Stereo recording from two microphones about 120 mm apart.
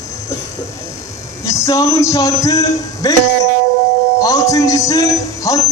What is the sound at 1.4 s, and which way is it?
A man's voice, 25° left (ahead or behind).